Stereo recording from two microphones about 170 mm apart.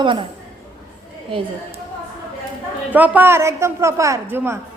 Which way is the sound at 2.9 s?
10° right (ahead or behind).